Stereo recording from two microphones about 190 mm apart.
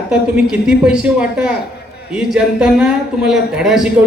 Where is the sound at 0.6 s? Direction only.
5° right (ahead or behind).